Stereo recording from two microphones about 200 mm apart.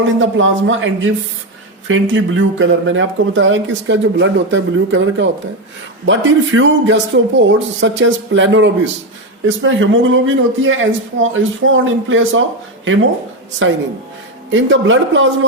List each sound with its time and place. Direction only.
0.0 s speech: 75° right (ahead or behind)
13.6 s speech: 70° right (ahead or behind)